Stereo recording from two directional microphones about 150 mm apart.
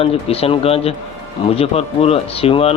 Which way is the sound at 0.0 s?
40° left (ahead or behind).